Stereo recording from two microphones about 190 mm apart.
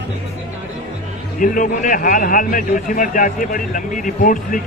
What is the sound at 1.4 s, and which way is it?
Speech, 45° left (ahead or behind).